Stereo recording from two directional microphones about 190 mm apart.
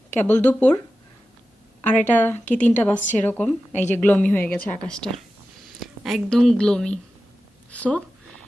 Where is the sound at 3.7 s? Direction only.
35° left (ahead or behind).